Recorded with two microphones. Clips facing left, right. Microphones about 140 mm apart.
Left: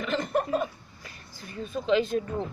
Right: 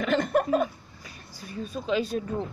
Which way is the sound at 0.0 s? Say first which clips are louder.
Right 4 dB; 55° right (ahead or behind).